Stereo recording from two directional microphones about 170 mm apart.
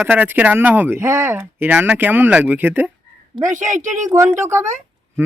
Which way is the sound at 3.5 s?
45° right (ahead or behind).